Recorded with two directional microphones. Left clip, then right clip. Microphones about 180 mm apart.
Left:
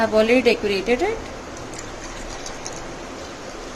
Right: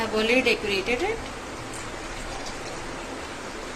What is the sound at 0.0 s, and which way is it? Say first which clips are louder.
Speech: left 6 dB; 55° left (ahead or behind).